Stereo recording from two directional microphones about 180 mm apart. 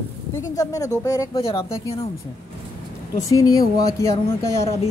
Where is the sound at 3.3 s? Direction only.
20° left (ahead or behind).